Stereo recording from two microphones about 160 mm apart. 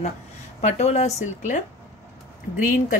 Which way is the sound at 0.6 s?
45° left (ahead or behind).